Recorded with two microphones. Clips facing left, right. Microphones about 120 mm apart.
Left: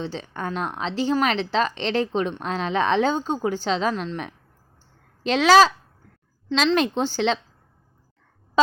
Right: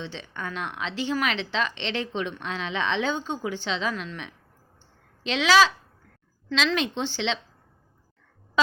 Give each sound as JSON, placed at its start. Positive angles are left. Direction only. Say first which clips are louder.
{"t": 0.0, "sound": "speech", "louder": "left 5 dB", "side_deg": 40}
{"t": 6.7, "sound": "speech", "louder": "left 6 dB", "side_deg": 40}
{"t": 8.6, "sound": "a sound", "louder": "left 6 dB", "side_deg": 35}